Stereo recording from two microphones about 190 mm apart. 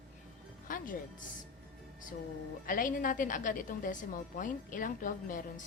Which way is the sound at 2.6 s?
45° left (ahead or behind).